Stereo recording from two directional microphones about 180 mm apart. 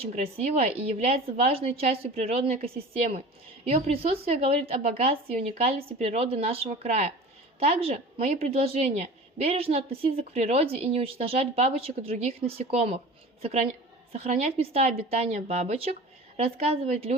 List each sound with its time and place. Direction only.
0.0 s a woman's voice: 35° right (ahead or behind)